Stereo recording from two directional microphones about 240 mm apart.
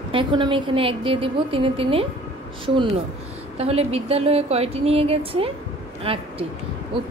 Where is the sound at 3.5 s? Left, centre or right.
Right.